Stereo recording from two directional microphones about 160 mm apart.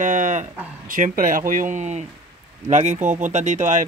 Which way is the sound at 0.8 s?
60° right (ahead or behind).